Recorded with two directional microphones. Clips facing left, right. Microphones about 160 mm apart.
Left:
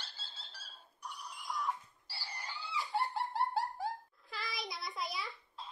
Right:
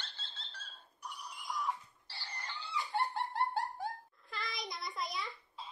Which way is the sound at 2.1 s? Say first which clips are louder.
Even; 10° left (ahead or behind).